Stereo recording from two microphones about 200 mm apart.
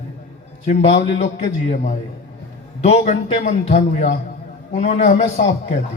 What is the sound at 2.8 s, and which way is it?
A man's voice, 35° left (ahead or behind).